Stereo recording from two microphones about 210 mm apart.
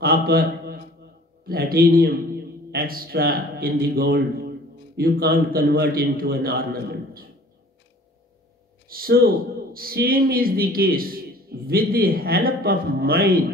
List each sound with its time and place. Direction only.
0.0 s a man's voice: 45° right (ahead or behind)
8.8 s a man's voice: 45° right (ahead or behind)